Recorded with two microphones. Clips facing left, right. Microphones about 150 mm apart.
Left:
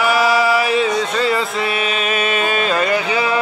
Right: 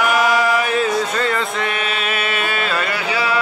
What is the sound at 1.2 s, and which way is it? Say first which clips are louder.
Music: left 2 dB; 5° left (ahead or behind).